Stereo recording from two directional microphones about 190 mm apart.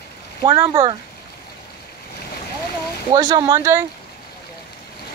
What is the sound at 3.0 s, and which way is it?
Speech, 20° right (ahead or behind).